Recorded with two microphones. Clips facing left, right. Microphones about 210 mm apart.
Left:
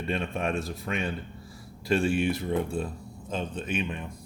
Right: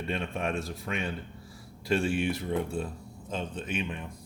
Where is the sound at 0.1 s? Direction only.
45° left (ahead or behind).